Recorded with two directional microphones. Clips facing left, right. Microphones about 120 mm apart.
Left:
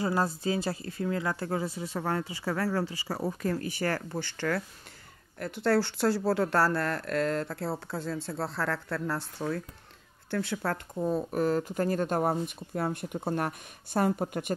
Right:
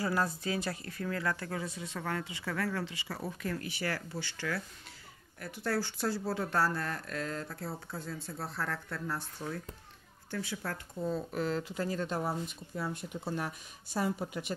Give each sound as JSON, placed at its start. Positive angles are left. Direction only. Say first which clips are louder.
{"t": 0.0, "sound": "speech", "louder": "left 4 dB", "side_deg": 25}
{"t": 5.4, "sound": "speech", "louder": "left 8 dB", "side_deg": 65}
{"t": 10.3, "sound": "speech", "louder": "left 7 dB", "side_deg": 65}
{"t": 11.0, "sound": "speech", "louder": "left 5 dB", "side_deg": 45}